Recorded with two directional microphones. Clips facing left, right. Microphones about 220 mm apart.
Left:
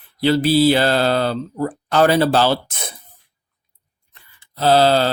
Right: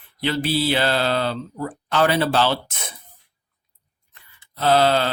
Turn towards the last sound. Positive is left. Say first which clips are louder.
# left 3 dB
turn(degrees=35)  # may be behind; listen again after turning